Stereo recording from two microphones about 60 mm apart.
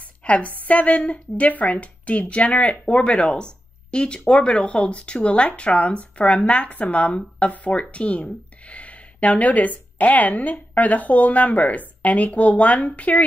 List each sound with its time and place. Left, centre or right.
0.2 s speech: left